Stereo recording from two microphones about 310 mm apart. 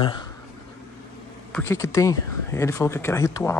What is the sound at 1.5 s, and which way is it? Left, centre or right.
Speech, centre.